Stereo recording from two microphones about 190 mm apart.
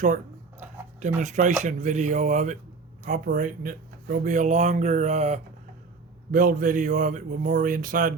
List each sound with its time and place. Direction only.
0.9 s a man's voice: 40° right (ahead or behind)